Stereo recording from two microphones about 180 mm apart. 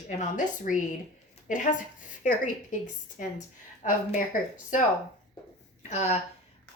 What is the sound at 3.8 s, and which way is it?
A woman's voice, 45° left (ahead or behind).